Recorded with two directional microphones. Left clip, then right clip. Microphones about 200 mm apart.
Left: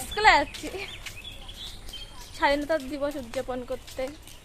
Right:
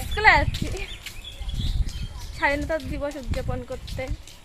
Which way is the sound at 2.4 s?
Centre (ahead or behind).